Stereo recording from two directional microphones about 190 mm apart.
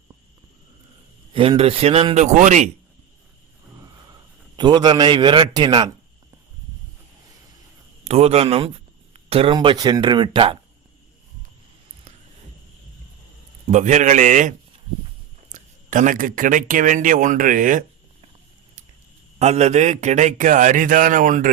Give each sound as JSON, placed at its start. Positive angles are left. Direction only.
{"t": 1.3, "sound": "a man's voice", "side_deg": -30}
{"t": 4.5, "sound": "a man's voice", "side_deg": -25}
{"t": 8.0, "sound": "a man's voice", "side_deg": -35}
{"t": 13.7, "sound": "a man's voice", "side_deg": -40}
{"t": 15.5, "sound": "speech", "side_deg": -45}
{"t": 19.4, "sound": "a man's voice", "side_deg": -35}